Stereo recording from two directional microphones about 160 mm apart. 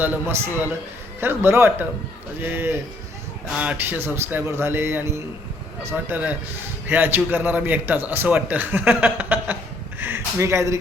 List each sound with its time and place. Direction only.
0.0 s a man's voice: 15° right (ahead or behind)